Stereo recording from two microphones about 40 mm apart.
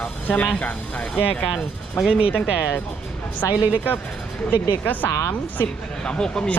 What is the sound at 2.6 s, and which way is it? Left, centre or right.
Speech, left.